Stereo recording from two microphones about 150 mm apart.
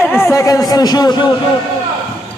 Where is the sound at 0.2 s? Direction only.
20° left (ahead or behind).